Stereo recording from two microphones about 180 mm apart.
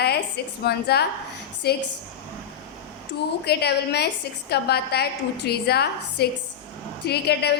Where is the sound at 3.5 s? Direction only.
65° left (ahead or behind).